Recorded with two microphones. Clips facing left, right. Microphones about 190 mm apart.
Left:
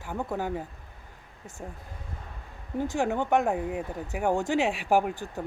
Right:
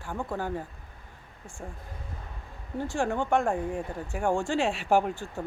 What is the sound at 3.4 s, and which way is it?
Speech, 5° left (ahead or behind).